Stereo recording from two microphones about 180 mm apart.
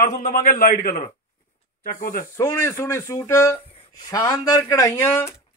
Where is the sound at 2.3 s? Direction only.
20° left (ahead or behind).